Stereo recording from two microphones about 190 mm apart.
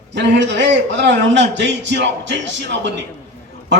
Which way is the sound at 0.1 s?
70° right (ahead or behind).